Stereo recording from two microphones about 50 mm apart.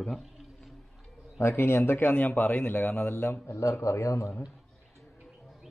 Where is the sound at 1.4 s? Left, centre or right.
Left.